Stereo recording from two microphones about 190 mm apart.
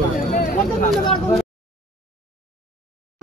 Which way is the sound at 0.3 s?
45° left (ahead or behind).